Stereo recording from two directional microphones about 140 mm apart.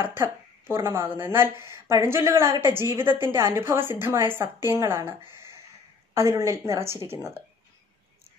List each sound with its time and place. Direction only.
0.0 s a woman's voice: 15° right (ahead or behind)